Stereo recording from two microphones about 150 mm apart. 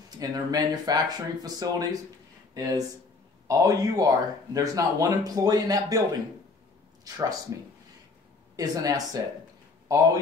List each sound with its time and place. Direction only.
0.2 s speech: 25° right (ahead or behind)
7.2 s speech: 25° right (ahead or behind)
8.5 s speech: 25° right (ahead or behind)